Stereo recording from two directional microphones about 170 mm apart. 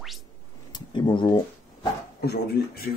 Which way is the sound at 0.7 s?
25° left (ahead or behind).